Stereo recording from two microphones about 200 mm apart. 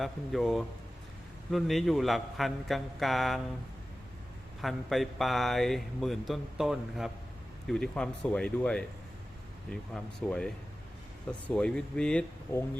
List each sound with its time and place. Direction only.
0.0 s speech: centre (ahead or behind)
4.6 s speech: centre (ahead or behind)
9.9 s speech: 5° left (ahead or behind)